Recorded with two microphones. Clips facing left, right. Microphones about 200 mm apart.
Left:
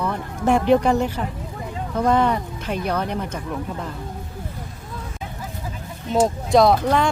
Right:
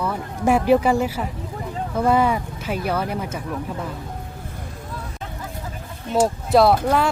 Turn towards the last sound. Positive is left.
turn(degrees=-5)  # may be behind; listen again after turning